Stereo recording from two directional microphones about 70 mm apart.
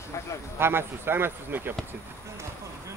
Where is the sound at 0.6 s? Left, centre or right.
Right.